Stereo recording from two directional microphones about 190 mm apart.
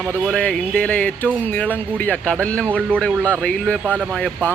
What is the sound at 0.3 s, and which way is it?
Speech, 5° left (ahead or behind).